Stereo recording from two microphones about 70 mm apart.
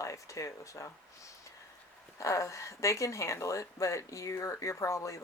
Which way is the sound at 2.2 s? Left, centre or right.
Left.